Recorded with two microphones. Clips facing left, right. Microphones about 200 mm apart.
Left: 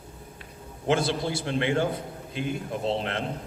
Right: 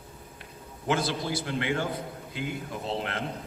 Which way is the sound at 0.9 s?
25° left (ahead or behind).